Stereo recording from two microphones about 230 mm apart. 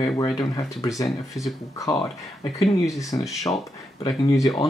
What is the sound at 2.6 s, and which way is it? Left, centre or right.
Speech, centre.